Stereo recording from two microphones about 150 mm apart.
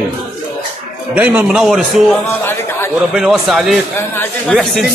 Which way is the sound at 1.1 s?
10° right (ahead or behind).